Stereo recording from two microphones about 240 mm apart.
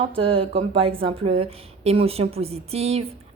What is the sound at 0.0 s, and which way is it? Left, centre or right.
Speech, right.